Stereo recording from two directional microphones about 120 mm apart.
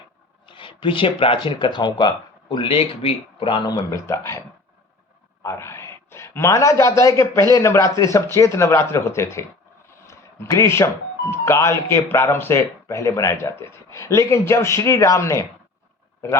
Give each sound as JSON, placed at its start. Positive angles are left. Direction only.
{"t": 0.4, "sound": "speech", "side_deg": 45}
{"t": 3.7, "sound": "speech", "side_deg": 25}
{"t": 10.1, "sound": "a sound", "side_deg": 25}
{"t": 11.3, "sound": "speech", "side_deg": 25}